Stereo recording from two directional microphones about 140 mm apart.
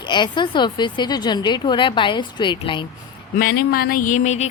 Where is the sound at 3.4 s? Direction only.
90° left; by 4.5 s 55° left (ahead or behind).